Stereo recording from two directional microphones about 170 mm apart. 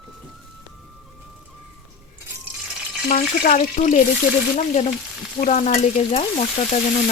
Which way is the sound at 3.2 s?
45° left (ahead or behind).